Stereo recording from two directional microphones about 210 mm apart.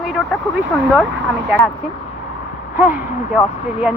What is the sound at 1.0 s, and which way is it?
Speech, 65° right (ahead or behind).